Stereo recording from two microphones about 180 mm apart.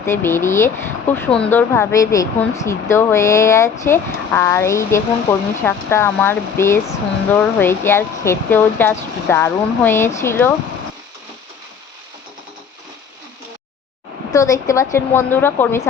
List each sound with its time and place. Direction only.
0.0 s speech: 15° left (ahead or behind)
14.3 s speech: 20° left (ahead or behind)